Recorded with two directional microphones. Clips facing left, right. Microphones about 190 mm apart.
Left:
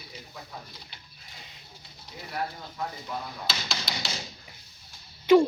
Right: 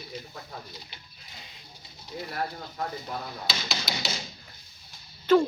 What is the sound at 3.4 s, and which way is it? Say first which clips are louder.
Speech: right 1 dB; centre (ahead or behind).